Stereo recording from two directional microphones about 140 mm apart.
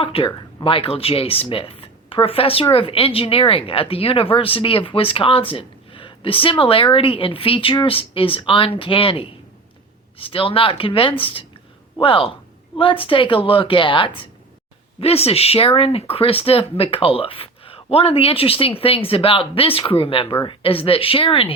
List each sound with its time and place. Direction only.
0.0 s speech: 40° left (ahead or behind)